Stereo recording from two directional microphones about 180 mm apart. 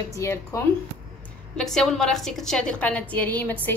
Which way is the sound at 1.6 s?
Centre (ahead or behind).